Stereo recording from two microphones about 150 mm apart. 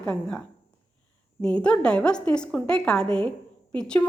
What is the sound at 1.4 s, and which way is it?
A woman's voice, 5° left (ahead or behind).